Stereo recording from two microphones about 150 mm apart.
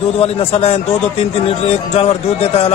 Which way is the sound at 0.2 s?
40° left (ahead or behind).